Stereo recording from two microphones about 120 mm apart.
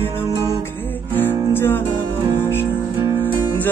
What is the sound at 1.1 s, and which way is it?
Music, 15° left (ahead or behind).